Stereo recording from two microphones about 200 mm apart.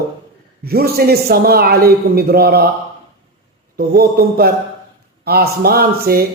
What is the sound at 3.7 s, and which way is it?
A man's voice, 50° right (ahead or behind).